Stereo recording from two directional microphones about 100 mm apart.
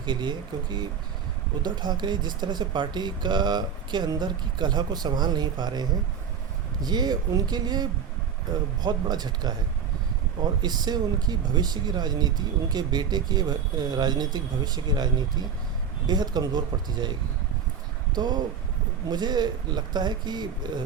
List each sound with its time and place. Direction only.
0.0 s speech: 50° right (ahead or behind)
10.6 s speech: 45° right (ahead or behind)